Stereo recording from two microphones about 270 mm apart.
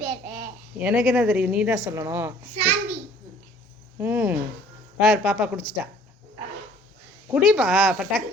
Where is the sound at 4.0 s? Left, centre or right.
Centre.